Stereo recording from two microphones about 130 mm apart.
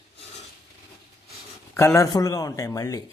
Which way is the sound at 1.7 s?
20° left (ahead or behind).